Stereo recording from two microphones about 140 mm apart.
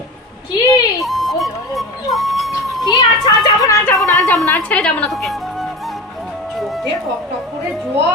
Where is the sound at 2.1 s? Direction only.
Centre (ahead or behind).